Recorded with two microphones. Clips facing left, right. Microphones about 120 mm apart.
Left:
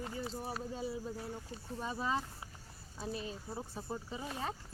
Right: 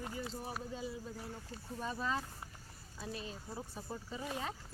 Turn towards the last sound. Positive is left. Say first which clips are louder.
# left 2 dB
turn(degrees=25)  # may be behind; listen again after turning